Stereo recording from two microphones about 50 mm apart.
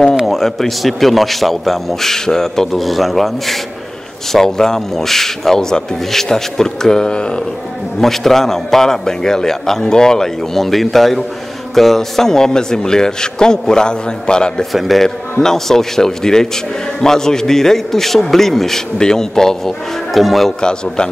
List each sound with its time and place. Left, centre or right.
0.1 s a man's voice: centre
8.0 s a man's voice: centre
14.7 s a man's voice: centre
20.6 s a man's voice: centre